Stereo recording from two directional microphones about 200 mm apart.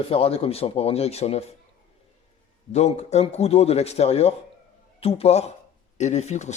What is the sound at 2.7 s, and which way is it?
Speech, 35° left (ahead or behind).